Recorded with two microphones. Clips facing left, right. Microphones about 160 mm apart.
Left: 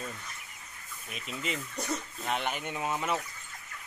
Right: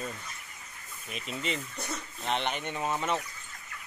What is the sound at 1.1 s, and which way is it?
Speech, centre (ahead or behind).